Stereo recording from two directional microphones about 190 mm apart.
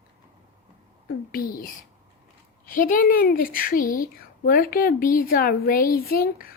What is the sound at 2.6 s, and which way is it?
A woman's voice, 45° left (ahead or behind).